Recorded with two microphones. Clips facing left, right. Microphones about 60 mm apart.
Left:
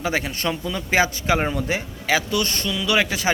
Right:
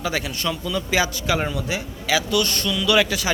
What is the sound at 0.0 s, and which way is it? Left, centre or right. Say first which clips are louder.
A man's voice: left 1 dB; left.